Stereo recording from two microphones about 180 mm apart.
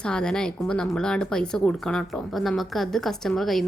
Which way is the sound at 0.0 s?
5° left (ahead or behind).